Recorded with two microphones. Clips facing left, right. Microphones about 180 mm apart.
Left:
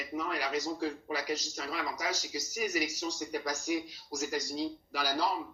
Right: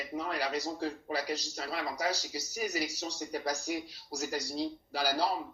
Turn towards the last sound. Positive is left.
turn(degrees=-35)  # may be behind; listen again after turning